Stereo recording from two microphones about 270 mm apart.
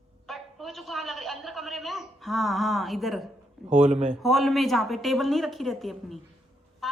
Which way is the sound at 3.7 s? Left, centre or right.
Right.